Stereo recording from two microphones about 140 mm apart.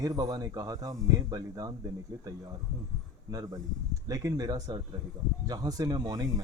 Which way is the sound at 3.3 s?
25° right (ahead or behind).